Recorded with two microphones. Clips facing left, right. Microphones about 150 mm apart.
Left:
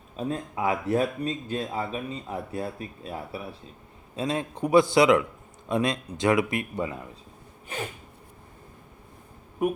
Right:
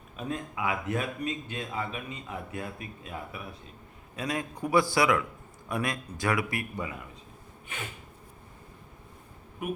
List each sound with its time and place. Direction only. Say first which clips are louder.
0.2 s a man's voice: left 4 dB; 35° left (ahead or behind)